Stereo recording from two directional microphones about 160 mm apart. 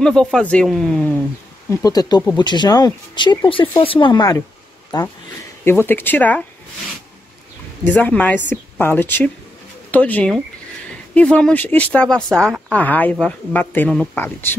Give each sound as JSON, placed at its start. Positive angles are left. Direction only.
{"t": 0.0, "sound": "speech", "side_deg": 5}
{"t": 1.7, "sound": "speech", "side_deg": 20}
{"t": 5.7, "sound": "speech", "side_deg": 15}
{"t": 7.8, "sound": "speech", "side_deg": 10}